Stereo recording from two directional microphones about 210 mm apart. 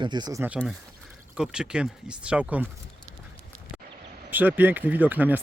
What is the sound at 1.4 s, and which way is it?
Speech, 5° right (ahead or behind).